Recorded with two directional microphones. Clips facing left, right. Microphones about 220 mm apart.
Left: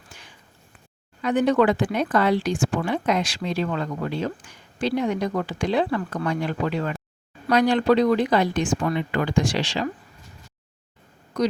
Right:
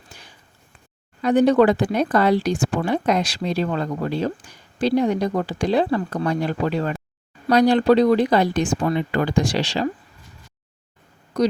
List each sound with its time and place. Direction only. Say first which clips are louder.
1.2 s speech: right 4 dB; 35° right (ahead or behind)
11.3 s speech: right 3 dB; 35° right (ahead or behind)